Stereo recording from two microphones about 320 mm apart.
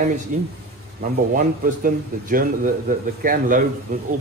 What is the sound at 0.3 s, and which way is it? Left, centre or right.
A man's voice, right.